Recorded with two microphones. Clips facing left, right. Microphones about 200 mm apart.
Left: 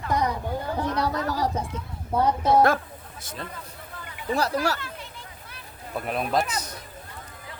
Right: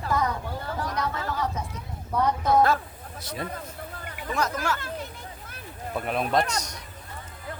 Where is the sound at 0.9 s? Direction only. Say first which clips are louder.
Left 4 dB; 35° left (ahead or behind).